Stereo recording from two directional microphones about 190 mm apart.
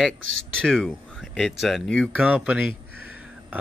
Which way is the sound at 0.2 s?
90° right.